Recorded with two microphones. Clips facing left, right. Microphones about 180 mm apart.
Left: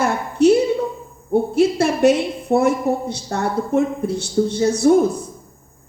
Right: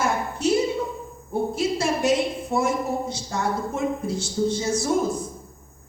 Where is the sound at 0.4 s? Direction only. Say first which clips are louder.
Left 10 dB; 65° left (ahead or behind).